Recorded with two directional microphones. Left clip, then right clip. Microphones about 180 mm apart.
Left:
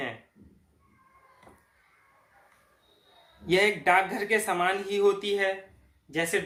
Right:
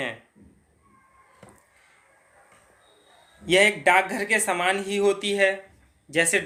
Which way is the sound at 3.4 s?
35° right (ahead or behind).